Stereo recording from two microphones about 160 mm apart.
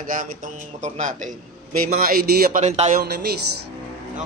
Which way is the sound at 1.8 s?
65° right (ahead or behind).